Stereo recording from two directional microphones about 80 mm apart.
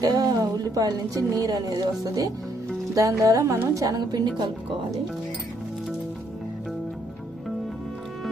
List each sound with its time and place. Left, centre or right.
0.0 s a woman's voice: right
2.9 s a woman's voice: right
3.8 s a woman's voice: right